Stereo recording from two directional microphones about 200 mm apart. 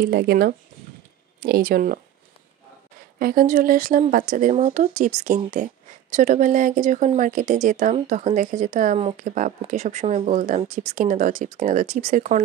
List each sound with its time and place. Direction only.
0.0 s speech: 50° right (ahead or behind)
3.2 s speech: 45° right (ahead or behind)